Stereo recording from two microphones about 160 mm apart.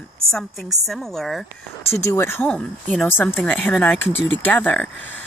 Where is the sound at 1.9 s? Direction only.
15° left (ahead or behind).